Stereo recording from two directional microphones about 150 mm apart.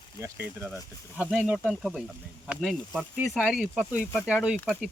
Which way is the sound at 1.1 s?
5° right (ahead or behind).